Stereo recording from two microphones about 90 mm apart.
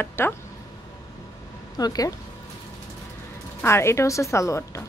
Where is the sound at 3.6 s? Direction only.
30° left (ahead or behind).